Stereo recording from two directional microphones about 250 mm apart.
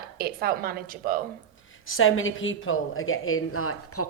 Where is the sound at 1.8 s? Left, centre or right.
Left.